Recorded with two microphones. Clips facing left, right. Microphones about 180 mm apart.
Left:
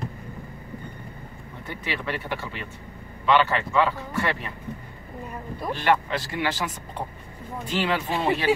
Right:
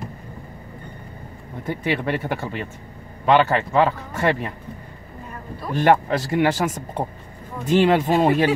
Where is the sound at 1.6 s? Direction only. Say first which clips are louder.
Right 8 dB; 45° right (ahead or behind).